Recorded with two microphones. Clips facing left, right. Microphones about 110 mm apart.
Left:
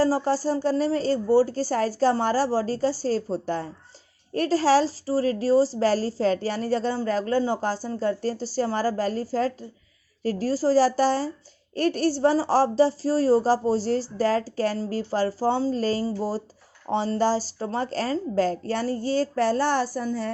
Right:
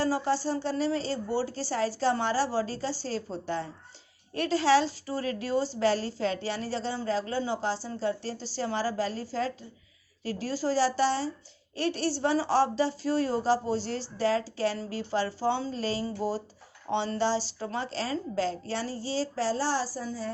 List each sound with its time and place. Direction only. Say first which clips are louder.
0.0 s a woman's voice: left 5 dB; 40° left (ahead or behind); by 20.3 s 65° left (ahead or behind)